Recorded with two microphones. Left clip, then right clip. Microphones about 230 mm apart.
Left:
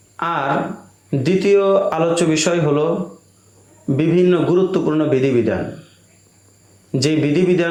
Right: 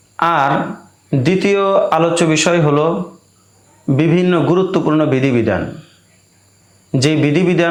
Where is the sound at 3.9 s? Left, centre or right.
Right.